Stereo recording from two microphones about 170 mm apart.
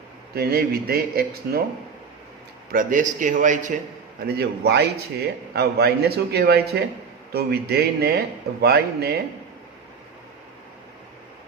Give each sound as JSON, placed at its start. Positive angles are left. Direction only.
{"t": 0.3, "sound": "speech", "side_deg": -65}
{"t": 2.7, "sound": "a man's voice", "side_deg": -50}
{"t": 4.3, "sound": "a man's voice", "side_deg": -70}